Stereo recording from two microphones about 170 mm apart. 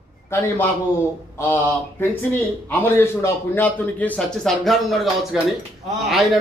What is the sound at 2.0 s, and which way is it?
A man's voice, 10° left (ahead or behind).